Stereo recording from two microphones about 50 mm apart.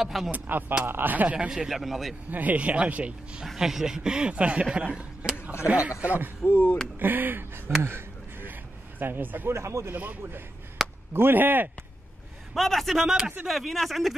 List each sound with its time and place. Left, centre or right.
0.0 s a man's voice: centre
0.3 s speech: right
1.5 s a man's voice: centre
2.3 s speech: right
3.5 s speech: centre; by 6.3 s right
6.4 s speech: left
7.0 s speech: right
7.8 s a sound: right
9.0 s speech: right
9.5 s speech: right
10.8 s chop: centre
11.1 s speech: right
12.5 s a man's voice: centre